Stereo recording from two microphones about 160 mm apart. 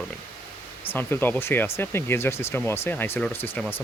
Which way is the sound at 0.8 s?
15° left (ahead or behind).